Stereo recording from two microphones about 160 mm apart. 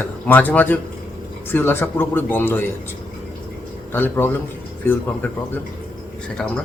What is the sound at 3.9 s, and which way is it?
A man's voice, 10° left (ahead or behind).